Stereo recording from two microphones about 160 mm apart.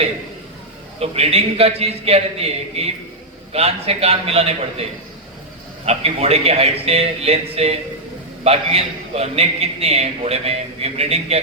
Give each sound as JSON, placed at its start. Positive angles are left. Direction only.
{"t": 0.9, "sound": "a man's voice", "side_deg": -40}